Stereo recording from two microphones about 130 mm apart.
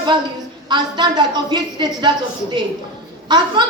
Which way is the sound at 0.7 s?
35° right (ahead or behind).